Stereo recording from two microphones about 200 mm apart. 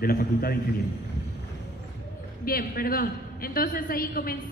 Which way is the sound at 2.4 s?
45° left (ahead or behind).